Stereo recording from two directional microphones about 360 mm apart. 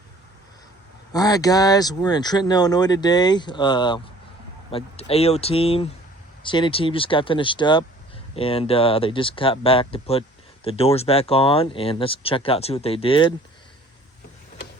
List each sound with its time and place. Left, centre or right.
1.1 s speech: centre